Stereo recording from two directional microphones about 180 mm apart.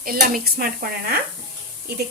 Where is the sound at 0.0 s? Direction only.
55° right (ahead or behind).